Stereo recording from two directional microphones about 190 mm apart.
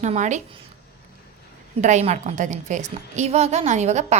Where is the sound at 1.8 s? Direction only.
35° right (ahead or behind).